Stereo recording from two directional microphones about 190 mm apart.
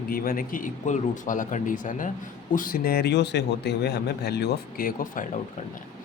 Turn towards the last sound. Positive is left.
turn(degrees=45)  # may be behind; listen again after turning